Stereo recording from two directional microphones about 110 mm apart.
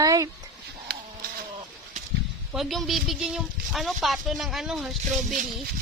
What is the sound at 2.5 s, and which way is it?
Speech, centre (ahead or behind).